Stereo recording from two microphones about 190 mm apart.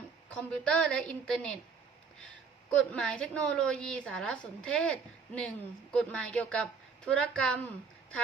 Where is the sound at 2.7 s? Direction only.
5° left (ahead or behind).